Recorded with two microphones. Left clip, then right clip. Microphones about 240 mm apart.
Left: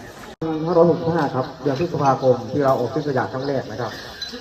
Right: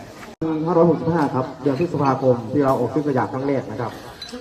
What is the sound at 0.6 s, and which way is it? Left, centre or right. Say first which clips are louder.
A man's voice: left 1 dB; right.